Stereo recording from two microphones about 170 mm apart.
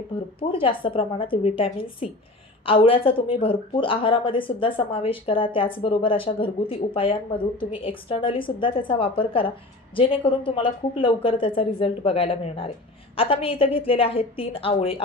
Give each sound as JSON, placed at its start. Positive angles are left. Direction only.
{"t": 0.4, "sound": "speech", "side_deg": 30}